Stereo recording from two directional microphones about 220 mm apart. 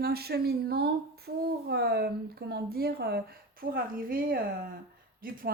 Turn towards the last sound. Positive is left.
turn(degrees=-40)  # may be behind; listen again after turning